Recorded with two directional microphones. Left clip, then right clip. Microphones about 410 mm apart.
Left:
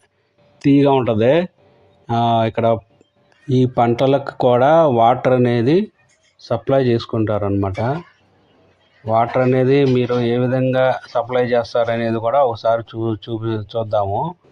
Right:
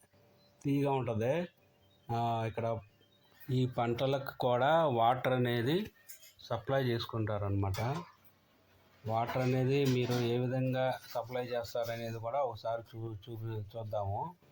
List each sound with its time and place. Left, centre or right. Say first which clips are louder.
0.6 s speech: left 19 dB; right
5.4 s speech: left 17 dB; centre
7.1 s speech: left 18 dB; right
9.0 s speech: left 18 dB; right